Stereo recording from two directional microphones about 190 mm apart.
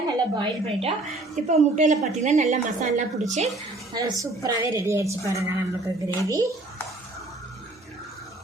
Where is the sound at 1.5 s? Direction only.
40° right (ahead or behind).